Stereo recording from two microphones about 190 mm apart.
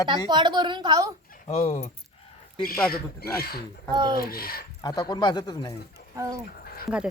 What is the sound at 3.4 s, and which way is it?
Speech, 55° left (ahead or behind).